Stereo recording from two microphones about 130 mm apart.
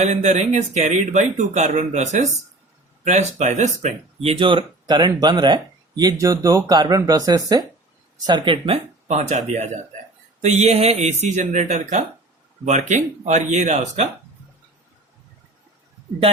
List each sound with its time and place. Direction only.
0.0 s speech: 60° right (ahead or behind)